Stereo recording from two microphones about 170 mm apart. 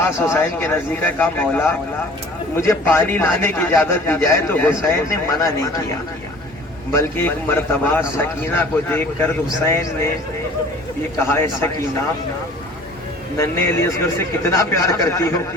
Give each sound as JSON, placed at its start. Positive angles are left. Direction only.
{"t": 0.3, "sound": "a man's voice", "side_deg": 15}
{"t": 6.9, "sound": "a man's voice", "side_deg": 10}
{"t": 11.3, "sound": "a man's voice", "side_deg": 15}
{"t": 13.3, "sound": "a man's voice", "side_deg": 15}